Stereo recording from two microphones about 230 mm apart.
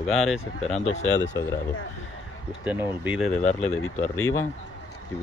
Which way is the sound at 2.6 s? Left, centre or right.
Centre.